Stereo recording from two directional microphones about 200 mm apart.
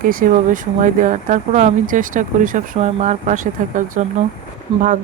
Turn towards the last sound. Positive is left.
turn(degrees=-25)  # may be behind; listen again after turning